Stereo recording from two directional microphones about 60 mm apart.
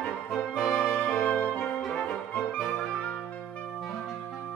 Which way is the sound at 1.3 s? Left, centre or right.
Left.